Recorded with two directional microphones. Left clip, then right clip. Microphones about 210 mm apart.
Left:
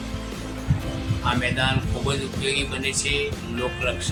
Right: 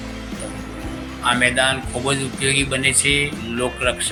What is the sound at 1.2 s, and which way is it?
Speech, 20° right (ahead or behind).